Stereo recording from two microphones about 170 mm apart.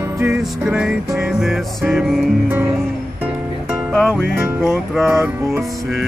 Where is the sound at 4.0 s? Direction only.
5° left (ahead or behind).